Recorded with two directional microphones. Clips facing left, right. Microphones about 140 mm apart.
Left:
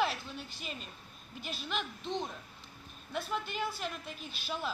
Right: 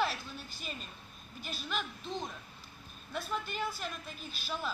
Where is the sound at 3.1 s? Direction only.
25° left (ahead or behind).